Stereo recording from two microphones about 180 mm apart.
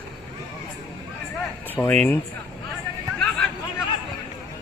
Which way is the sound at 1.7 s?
10° left (ahead or behind).